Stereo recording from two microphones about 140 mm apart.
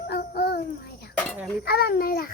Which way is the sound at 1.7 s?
90° left.